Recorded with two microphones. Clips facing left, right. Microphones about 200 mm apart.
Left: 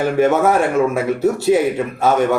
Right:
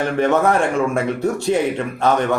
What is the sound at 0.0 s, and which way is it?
A man's voice, 5° left (ahead or behind).